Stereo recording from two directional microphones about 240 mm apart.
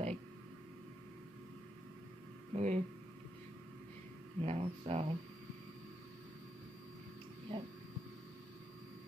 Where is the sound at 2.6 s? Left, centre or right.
Right.